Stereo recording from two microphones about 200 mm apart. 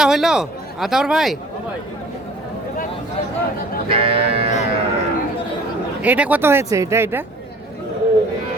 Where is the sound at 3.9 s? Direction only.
30° right (ahead or behind).